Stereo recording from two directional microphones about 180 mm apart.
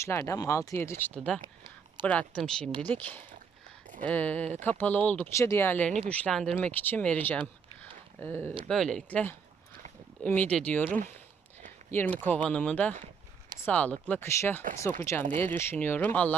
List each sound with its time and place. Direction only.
0.0 s speech: 15° left (ahead or behind)
1.4 s a sound: 25° right (ahead or behind)
2.0 s speech: 5° left (ahead or behind)
14.6 s speech: 50° right (ahead or behind)
15.0 s speech: 10° left (ahead or behind)